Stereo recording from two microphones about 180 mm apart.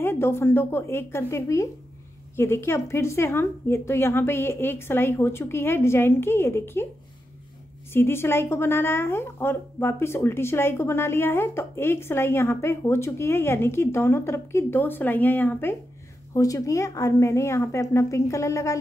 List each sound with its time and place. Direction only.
0.0 s speech: 15° left (ahead or behind)
7.9 s speech: 15° left (ahead or behind)